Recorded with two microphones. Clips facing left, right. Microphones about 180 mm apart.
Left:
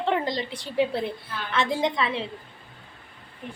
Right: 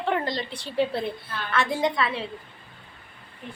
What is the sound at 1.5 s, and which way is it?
Speech, 20° left (ahead or behind).